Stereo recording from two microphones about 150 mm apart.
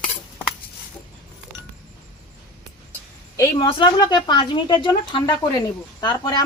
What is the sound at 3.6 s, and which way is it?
Speech, 35° left (ahead or behind).